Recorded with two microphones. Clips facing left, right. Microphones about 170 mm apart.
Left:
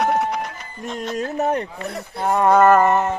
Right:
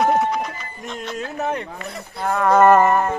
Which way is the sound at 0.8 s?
40° left (ahead or behind).